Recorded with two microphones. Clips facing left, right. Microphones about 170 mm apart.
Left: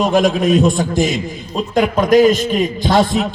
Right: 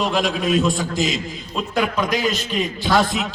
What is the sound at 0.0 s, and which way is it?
A man's voice, 45° left (ahead or behind).